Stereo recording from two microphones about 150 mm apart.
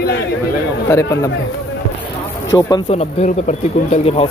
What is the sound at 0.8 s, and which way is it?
Speech, 20° left (ahead or behind).